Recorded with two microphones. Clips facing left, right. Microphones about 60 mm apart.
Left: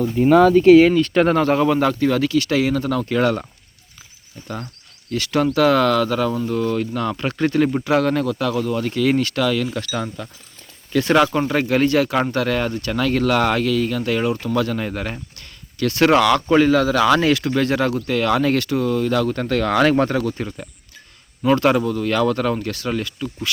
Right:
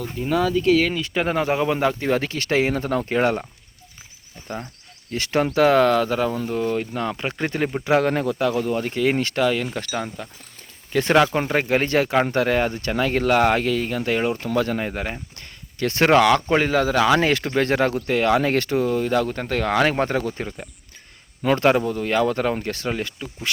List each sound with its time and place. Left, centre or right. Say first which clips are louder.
0.2 s speech: left 9 dB; left
0.9 s speech: left 7 dB; centre
2.0 s speech: left 5 dB; right
5.1 s speech: left 2 dB; right
11.1 s speech: left 1 dB; centre
11.3 s speech: left 2 dB; right